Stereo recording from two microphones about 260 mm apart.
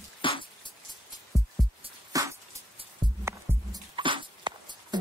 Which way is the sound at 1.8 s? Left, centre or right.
Centre.